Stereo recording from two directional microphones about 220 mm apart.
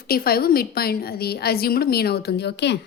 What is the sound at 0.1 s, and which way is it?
A woman's voice, 45° left (ahead or behind).